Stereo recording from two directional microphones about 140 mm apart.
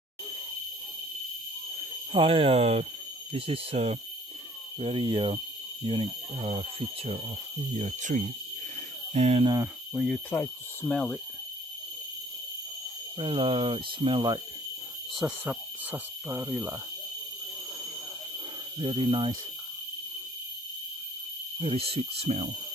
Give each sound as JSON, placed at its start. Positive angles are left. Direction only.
{"t": 2.1, "sound": "speech", "side_deg": -40}
{"t": 7.7, "sound": "speech", "side_deg": -55}
{"t": 9.9, "sound": "speech", "side_deg": 0}
{"t": 10.3, "sound": "speech", "side_deg": 15}
{"t": 13.2, "sound": "speech", "side_deg": -40}
{"t": 15.1, "sound": "speech", "side_deg": -10}
{"t": 18.8, "sound": "speech", "side_deg": -35}
{"t": 21.5, "sound": "speech", "side_deg": -45}